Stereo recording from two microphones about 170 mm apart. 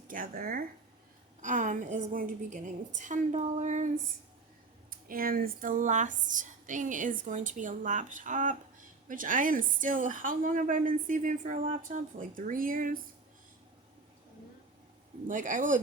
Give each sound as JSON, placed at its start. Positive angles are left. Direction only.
{"t": 0.1, "sound": "speech", "side_deg": -55}
{"t": 4.9, "sound": "speech", "side_deg": -55}
{"t": 15.3, "sound": "speech", "side_deg": -50}